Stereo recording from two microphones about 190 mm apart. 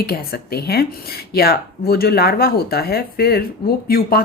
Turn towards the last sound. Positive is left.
turn(degrees=55)  # may be behind; listen again after turning